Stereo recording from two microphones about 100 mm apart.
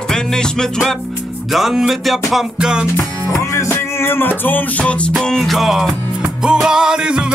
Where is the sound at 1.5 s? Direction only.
5° right (ahead or behind).